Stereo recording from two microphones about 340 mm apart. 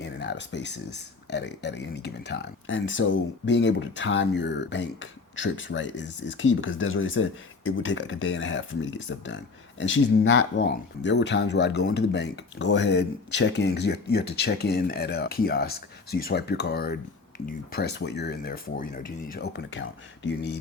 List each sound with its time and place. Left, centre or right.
0.0 s speech: left